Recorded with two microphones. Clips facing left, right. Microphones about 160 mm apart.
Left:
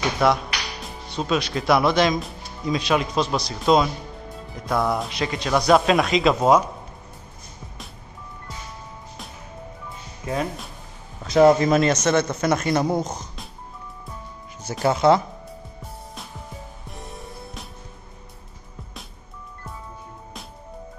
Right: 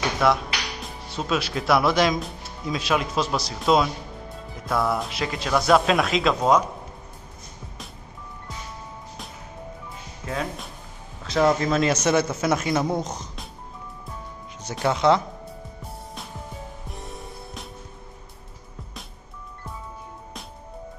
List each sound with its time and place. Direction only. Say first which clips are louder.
0.2 s speech: left 1 dB; centre (ahead or behind)
10.2 s speech: left 3 dB; 10° left (ahead or behind)
11.3 s speech: left 6 dB; 20° left (ahead or behind)
11.8 s speech: left 1 dB; 10° right (ahead or behind)
14.6 s speech: left 2 dB; centre (ahead or behind)
16.9 s music: left 3 dB; centre (ahead or behind)